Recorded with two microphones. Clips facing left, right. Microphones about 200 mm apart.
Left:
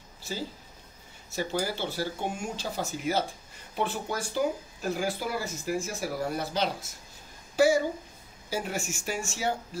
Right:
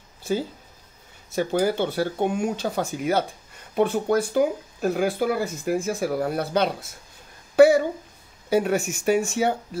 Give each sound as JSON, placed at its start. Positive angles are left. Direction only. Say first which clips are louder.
{"t": 1.3, "sound": "a woman's voice", "louder": "right 8 dB", "side_deg": -55}